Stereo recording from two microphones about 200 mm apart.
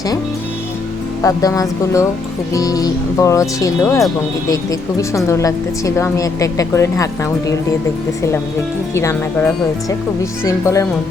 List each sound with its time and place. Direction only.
1.2 s a woman's voice: 15° left (ahead or behind)
9.0 s a woman's voice: 15° left (ahead or behind)